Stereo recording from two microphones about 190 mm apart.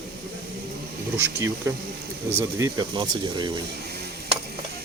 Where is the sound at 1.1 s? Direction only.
15° right (ahead or behind).